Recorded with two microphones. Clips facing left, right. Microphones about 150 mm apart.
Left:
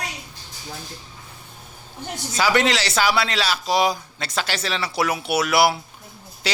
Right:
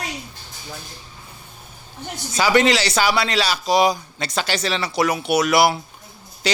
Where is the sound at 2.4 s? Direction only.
Centre (ahead or behind).